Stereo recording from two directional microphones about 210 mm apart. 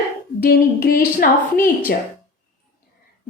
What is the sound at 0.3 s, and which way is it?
Speech, 45° left (ahead or behind).